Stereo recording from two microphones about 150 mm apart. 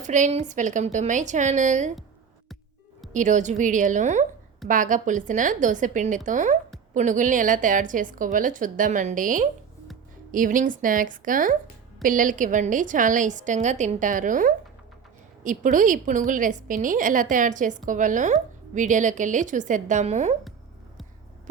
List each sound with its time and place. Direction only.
0.0 s a woman's voice: 55° right (ahead or behind)
3.1 s a woman's voice: 55° right (ahead or behind)